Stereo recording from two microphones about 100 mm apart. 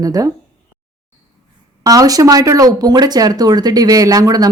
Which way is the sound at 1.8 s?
35° right (ahead or behind).